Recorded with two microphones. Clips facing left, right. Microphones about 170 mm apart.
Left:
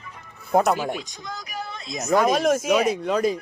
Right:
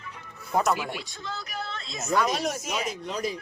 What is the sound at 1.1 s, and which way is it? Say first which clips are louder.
Speech: left 2 dB; 15° left (ahead or behind).